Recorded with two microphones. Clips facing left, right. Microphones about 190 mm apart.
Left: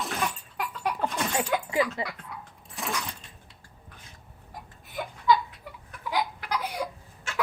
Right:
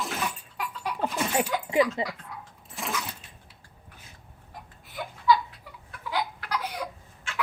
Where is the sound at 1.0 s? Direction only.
5° right (ahead or behind).